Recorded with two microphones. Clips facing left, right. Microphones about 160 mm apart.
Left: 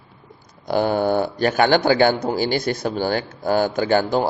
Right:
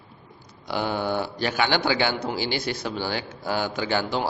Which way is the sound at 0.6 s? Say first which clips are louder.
Left 7 dB; 45° left (ahead or behind).